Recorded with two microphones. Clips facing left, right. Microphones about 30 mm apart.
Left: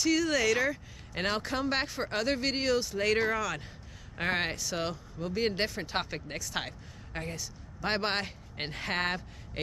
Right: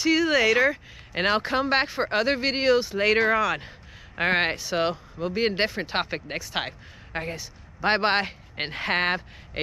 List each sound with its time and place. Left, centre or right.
0.0 s speech: right